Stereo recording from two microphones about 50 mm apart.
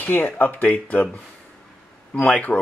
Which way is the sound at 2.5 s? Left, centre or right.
Left.